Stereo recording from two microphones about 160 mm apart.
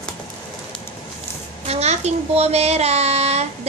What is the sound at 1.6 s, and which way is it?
A child's voice, 40° right (ahead or behind).